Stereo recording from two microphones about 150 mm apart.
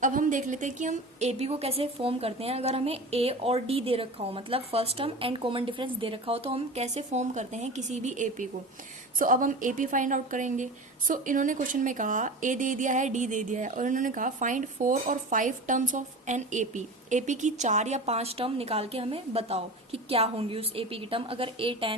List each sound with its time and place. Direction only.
0.0 s a woman's voice: 60° right (ahead or behind); by 21.9 s 35° right (ahead or behind)